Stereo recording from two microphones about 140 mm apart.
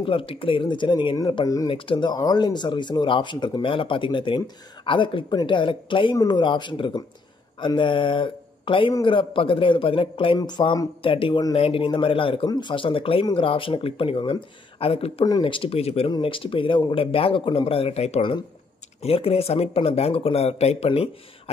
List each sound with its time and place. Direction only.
0.0 s speech: 40° left (ahead or behind)